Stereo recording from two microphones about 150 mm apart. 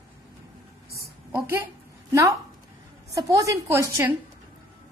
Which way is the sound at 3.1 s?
20° right (ahead or behind).